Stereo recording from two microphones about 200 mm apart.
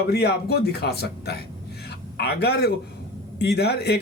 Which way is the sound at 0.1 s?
55° left (ahead or behind).